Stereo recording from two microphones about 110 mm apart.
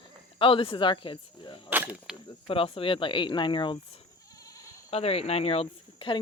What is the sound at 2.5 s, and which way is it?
Speech, 55° left (ahead or behind).